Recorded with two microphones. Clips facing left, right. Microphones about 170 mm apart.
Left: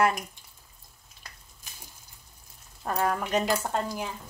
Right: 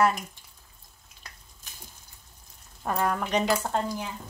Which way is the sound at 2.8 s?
Centre (ahead or behind).